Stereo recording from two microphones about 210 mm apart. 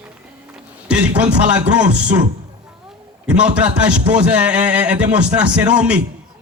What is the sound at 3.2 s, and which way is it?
A man's voice, 5° right (ahead or behind).